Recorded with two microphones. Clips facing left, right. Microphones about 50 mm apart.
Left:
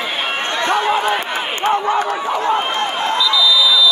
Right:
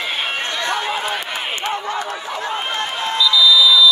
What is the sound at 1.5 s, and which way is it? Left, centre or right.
Crowd, left.